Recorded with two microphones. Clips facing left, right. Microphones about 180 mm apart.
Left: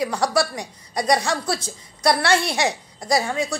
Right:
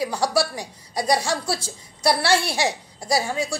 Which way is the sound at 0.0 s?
Centre (ahead or behind).